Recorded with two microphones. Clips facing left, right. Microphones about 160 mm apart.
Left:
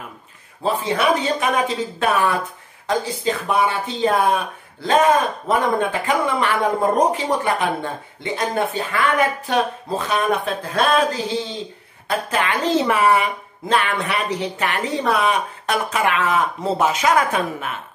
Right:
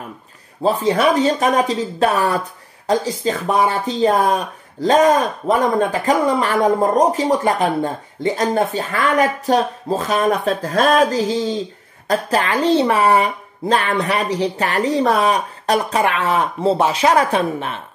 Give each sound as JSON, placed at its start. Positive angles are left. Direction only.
{"t": 0.7, "sound": "speech", "side_deg": -40}